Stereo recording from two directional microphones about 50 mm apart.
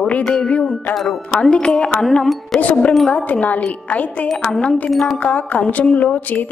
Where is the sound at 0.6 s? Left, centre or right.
Centre.